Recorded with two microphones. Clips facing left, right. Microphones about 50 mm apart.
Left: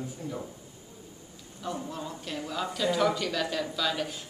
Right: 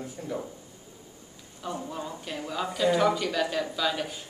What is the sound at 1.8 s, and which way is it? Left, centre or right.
Speech, centre.